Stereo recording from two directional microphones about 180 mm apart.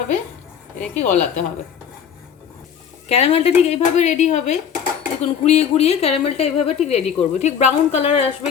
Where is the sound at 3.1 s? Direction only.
35° left (ahead or behind).